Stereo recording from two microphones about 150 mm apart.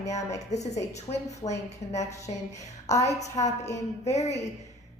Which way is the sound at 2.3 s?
35° left (ahead or behind).